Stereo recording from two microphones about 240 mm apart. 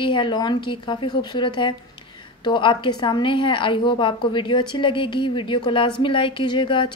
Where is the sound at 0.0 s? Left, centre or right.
Centre.